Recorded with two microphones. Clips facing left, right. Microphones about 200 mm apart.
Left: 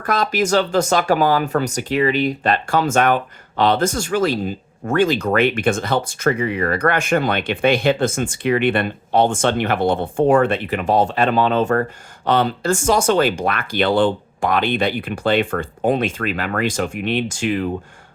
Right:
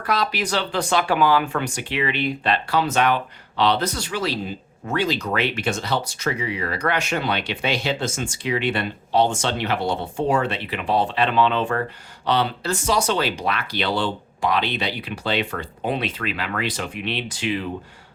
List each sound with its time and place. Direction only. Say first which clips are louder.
0.0 s speech: left 4 dB; 45° left (ahead or behind)